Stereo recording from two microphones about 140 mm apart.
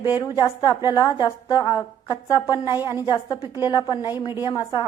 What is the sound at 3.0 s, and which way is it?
Speech, 30° left (ahead or behind).